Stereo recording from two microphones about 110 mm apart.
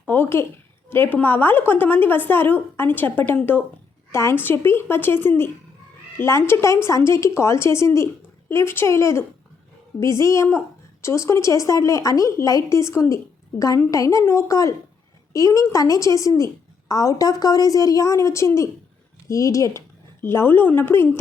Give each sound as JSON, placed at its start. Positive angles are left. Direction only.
{"t": 0.1, "sound": "a woman's voice", "side_deg": 20}